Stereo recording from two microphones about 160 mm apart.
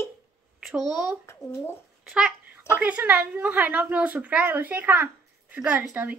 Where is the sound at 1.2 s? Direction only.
15° left (ahead or behind).